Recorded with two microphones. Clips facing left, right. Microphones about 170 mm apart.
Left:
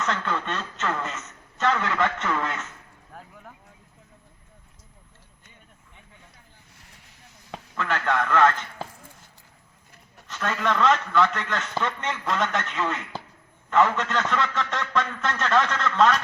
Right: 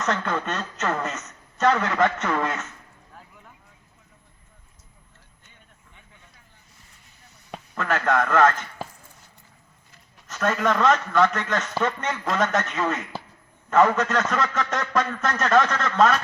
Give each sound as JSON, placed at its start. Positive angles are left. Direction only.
{"t": 0.0, "sound": "a man's voice", "side_deg": -40}
{"t": 7.8, "sound": "a man's voice", "side_deg": -40}
{"t": 10.2, "sound": "a man's voice", "side_deg": -40}